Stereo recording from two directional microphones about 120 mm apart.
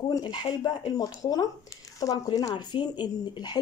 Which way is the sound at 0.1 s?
40° left (ahead or behind).